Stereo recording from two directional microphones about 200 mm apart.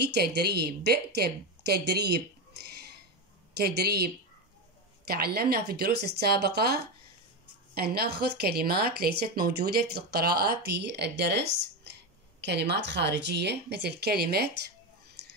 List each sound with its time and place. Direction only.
0.0 s speech: 55° right (ahead or behind)
3.5 s speech: 55° right (ahead or behind)